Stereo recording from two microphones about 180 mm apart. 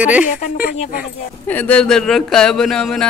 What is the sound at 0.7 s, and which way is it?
Speech, 50° left (ahead or behind).